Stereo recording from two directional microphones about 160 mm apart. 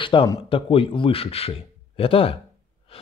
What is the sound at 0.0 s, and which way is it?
Speech, 30° left (ahead or behind).